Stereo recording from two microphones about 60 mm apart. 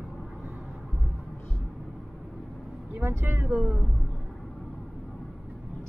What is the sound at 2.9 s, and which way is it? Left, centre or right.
Speech, right.